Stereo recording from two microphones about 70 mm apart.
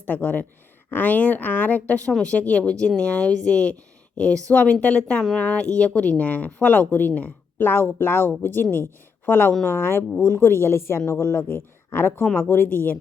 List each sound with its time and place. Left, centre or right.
0.1 s a woman's voice: left